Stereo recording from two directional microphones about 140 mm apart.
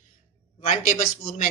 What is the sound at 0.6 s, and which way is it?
Speech, 70° left (ahead or behind).